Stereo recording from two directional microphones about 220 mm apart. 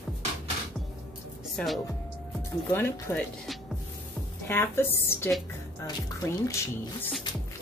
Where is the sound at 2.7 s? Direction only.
10° left (ahead or behind).